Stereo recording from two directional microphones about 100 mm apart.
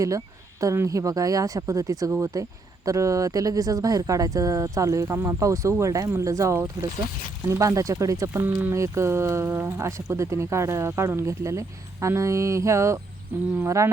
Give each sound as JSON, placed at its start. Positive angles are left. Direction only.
{"t": 0.6, "sound": "speech", "side_deg": -30}